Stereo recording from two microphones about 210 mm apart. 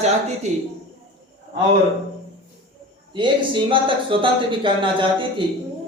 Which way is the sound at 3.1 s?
20° right (ahead or behind).